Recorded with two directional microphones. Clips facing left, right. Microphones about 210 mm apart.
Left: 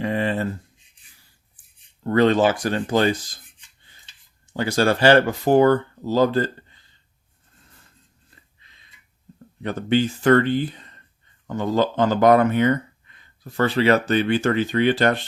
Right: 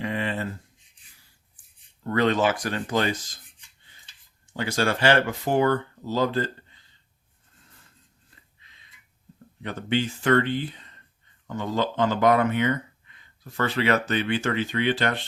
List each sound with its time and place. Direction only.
0.0 s a sound: 40° left (ahead or behind)
2.0 s speech: 30° left (ahead or behind)
4.5 s speech: 35° left (ahead or behind)
9.6 s speech: 40° left (ahead or behind)